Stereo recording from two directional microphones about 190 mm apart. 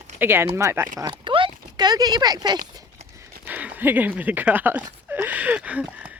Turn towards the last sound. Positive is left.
turn(degrees=-5)  # may be behind; listen again after turning